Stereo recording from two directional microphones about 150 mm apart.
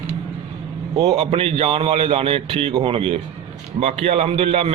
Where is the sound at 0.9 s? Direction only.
30° right (ahead or behind).